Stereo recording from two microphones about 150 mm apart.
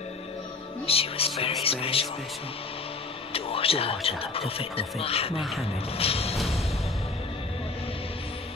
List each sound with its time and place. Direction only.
0.8 s speech: 40° left (ahead or behind)
3.3 s speech: 40° left (ahead or behind)
5.4 s music: centre (ahead or behind)
5.9 s speech: 40° left (ahead or behind)
6.3 s music: centre (ahead or behind)